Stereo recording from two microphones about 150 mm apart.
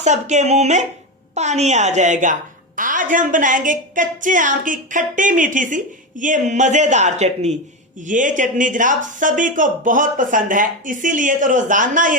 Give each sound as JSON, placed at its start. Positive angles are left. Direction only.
{"t": 0.0, "sound": "a woman's voice", "side_deg": -50}